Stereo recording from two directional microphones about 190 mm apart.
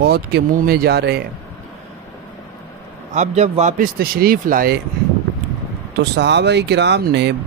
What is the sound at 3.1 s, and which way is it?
Speech, 35° right (ahead or behind).